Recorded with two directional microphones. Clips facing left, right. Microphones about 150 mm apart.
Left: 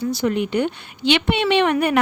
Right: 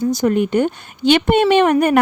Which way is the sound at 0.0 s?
45° right (ahead or behind).